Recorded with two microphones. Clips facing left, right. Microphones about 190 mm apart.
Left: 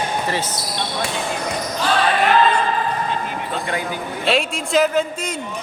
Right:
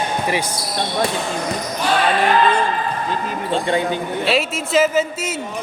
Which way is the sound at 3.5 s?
25° right (ahead or behind).